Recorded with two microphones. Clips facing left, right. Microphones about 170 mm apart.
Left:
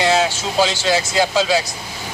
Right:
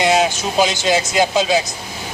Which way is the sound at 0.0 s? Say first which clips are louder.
Right 1 dB; 15° right (ahead or behind).